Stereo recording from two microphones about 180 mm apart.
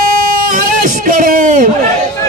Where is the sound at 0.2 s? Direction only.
50° right (ahead or behind).